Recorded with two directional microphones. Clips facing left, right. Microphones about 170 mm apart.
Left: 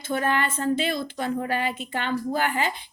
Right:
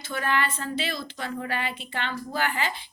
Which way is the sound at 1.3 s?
40° left (ahead or behind).